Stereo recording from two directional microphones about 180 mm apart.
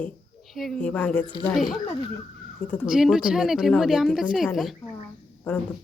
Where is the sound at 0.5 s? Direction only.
Centre (ahead or behind).